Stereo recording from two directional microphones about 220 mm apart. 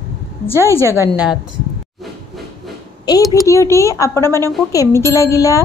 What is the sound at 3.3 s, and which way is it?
A woman's voice, 15° left (ahead or behind).